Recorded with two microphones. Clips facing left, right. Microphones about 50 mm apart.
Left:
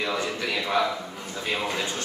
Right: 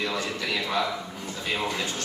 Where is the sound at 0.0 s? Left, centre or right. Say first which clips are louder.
Left 2 dB; centre.